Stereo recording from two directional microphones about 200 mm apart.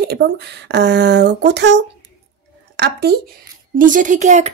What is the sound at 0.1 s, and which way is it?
Speech, 55° right (ahead or behind).